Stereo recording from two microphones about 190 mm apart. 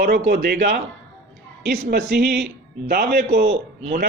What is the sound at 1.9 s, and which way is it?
Speech, 65° right (ahead or behind).